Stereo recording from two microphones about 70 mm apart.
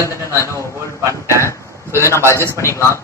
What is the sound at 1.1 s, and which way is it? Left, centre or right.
A man's voice, left.